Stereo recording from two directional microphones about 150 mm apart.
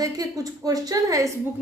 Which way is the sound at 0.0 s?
25° right (ahead or behind).